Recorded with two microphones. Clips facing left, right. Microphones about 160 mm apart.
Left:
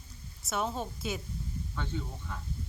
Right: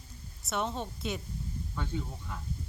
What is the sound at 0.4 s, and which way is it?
Speech, centre (ahead or behind).